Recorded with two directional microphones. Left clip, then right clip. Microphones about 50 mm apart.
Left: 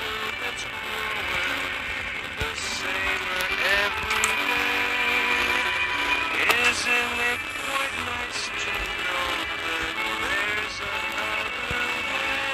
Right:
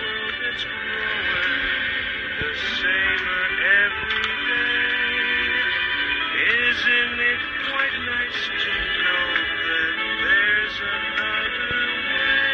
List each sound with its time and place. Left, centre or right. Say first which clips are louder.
3.6 s music: right 5 dB; centre
6.9 s music: right 4 dB; left